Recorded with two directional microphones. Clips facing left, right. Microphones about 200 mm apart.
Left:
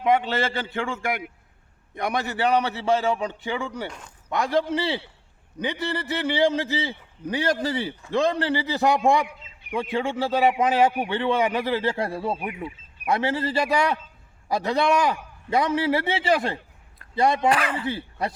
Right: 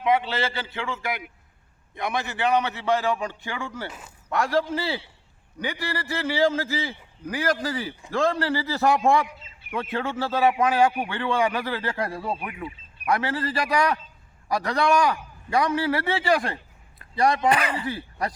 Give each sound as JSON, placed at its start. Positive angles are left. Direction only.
{"t": 0.0, "sound": "a man's voice", "side_deg": 45}
{"t": 2.0, "sound": "a man's voice", "side_deg": 40}
{"t": 3.0, "sound": "a man's voice", "side_deg": 25}
{"t": 3.8, "sound": "speech", "side_deg": -5}
{"t": 4.3, "sound": "a man's voice", "side_deg": 20}
{"t": 17.5, "sound": "speech", "side_deg": 0}
{"t": 17.8, "sound": "speech", "side_deg": 25}